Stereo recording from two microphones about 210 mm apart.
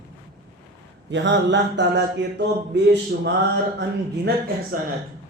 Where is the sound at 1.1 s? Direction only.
60° right (ahead or behind).